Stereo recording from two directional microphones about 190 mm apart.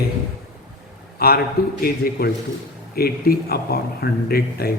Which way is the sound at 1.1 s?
55° left (ahead or behind).